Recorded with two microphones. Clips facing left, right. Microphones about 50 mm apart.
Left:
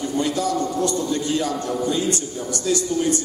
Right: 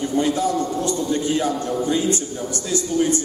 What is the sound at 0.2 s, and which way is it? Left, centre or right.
A man's voice, right.